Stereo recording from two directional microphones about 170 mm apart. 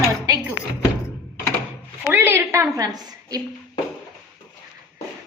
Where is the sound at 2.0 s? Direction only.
10° right (ahead or behind).